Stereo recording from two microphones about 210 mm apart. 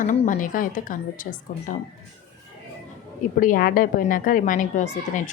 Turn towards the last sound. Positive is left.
turn(degrees=35)  # may be behind; listen again after turning